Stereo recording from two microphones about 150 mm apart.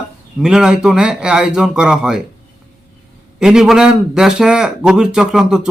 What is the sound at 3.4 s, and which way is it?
Speech, 5° right (ahead or behind).